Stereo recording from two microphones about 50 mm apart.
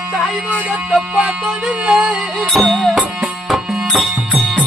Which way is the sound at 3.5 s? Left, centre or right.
Centre.